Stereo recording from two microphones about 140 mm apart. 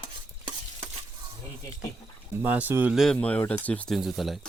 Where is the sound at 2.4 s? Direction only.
15° right (ahead or behind).